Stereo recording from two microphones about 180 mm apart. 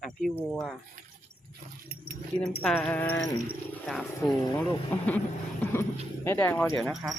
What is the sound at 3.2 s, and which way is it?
Speech, 20° left (ahead or behind).